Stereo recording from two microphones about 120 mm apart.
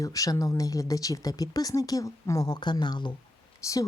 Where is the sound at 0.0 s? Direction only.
30° left (ahead or behind).